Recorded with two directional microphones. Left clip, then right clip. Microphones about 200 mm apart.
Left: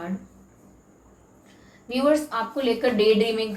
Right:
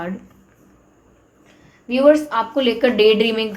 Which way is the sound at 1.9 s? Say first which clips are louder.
Right 8 dB; 45° right (ahead or behind).